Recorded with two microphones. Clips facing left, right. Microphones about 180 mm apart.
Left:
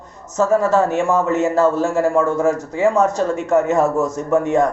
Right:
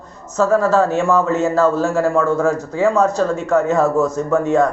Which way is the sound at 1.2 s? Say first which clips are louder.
Even; 20° left (ahead or behind).